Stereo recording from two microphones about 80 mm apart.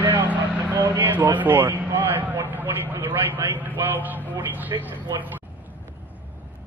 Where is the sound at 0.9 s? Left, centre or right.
Right.